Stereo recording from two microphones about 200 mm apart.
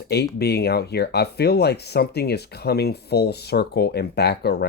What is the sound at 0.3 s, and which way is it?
Speech, 55° left (ahead or behind).